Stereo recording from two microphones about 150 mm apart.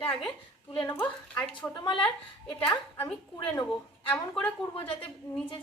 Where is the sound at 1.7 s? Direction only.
30° left (ahead or behind).